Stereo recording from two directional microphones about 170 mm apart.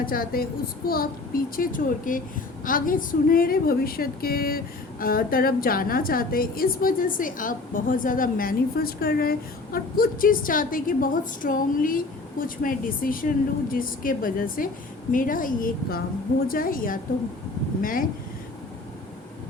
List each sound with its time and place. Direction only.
0.0 s a woman's voice: 60° left (ahead or behind)